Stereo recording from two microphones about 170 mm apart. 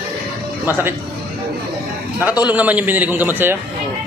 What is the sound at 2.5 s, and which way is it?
A man's voice, 10° right (ahead or behind).